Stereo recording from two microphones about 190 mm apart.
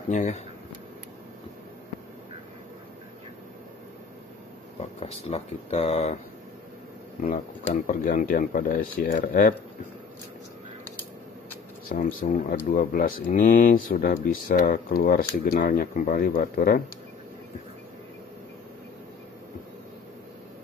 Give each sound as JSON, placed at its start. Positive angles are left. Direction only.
{"t": 0.1, "sound": "speech", "side_deg": 35}
{"t": 4.7, "sound": "speech", "side_deg": 35}
{"t": 7.2, "sound": "speech", "side_deg": 45}
{"t": 11.9, "sound": "speech", "side_deg": 45}